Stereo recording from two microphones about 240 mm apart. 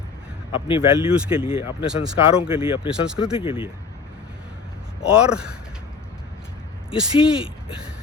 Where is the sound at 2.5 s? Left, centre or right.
Left.